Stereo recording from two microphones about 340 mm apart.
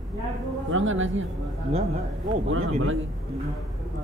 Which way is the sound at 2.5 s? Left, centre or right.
Right.